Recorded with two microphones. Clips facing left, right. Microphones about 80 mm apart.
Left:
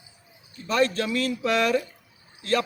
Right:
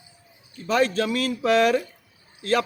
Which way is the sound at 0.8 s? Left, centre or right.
Right.